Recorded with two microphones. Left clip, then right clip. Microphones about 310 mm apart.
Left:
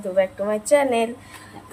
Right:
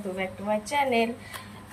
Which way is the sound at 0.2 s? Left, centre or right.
Centre.